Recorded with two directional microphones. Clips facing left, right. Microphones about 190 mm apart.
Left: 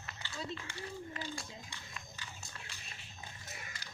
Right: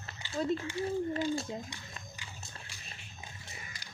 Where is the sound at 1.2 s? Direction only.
25° right (ahead or behind).